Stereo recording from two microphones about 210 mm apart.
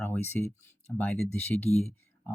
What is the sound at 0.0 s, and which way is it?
Speech, 10° left (ahead or behind).